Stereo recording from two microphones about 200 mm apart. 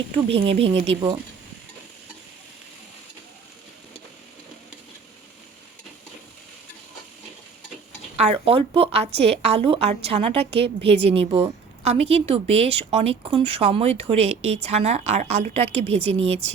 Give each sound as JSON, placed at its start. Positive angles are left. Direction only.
{"t": 0.3, "sound": "a woman's voice", "side_deg": -30}
{"t": 8.1, "sound": "a woman's voice", "side_deg": -30}